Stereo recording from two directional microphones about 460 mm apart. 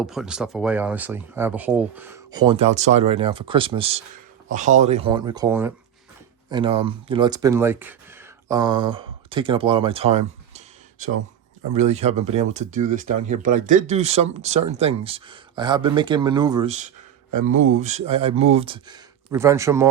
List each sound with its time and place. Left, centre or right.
0.0 s speech: centre